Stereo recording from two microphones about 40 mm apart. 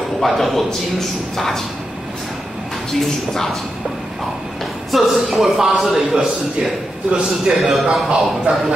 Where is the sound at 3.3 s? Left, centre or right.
Centre.